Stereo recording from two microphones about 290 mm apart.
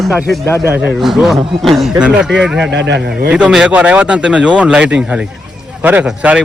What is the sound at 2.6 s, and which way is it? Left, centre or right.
Speech, right.